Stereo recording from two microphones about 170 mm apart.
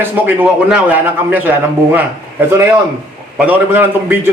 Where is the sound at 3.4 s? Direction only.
10° right (ahead or behind).